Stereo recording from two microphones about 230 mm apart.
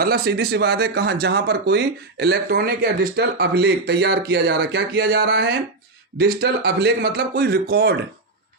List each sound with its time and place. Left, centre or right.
0.0 s speech: right